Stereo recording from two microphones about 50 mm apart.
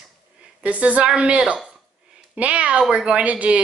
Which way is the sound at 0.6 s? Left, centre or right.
Right.